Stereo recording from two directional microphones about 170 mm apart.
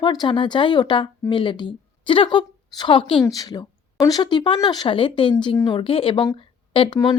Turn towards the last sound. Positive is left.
turn(degrees=30)  # may be behind; listen again after turning